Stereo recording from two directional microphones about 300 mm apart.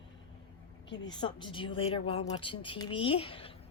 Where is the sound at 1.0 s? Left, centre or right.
Centre.